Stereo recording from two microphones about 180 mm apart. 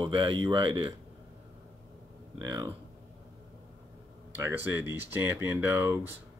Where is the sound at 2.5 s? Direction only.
20° right (ahead or behind).